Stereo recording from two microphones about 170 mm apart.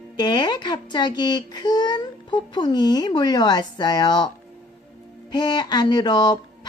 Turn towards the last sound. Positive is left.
turn(degrees=25)  # may be behind; listen again after turning